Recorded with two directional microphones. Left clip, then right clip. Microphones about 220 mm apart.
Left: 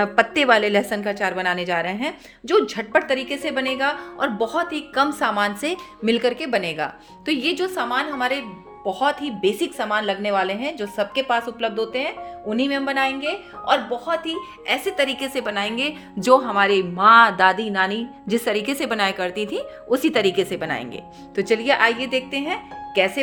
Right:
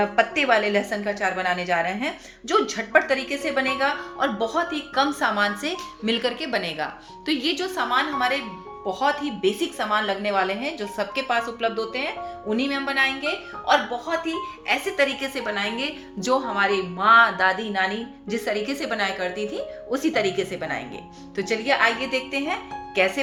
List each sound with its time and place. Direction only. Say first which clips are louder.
0.0 s a woman's voice: left 3 dB; 55° left (ahead or behind)